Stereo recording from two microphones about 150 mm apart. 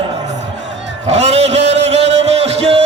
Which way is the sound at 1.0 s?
45° right (ahead or behind).